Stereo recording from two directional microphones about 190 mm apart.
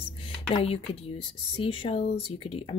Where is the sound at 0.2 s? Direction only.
30° left (ahead or behind).